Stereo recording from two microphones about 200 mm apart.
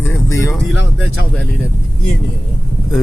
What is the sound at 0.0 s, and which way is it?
Vehicle, 10° left (ahead or behind).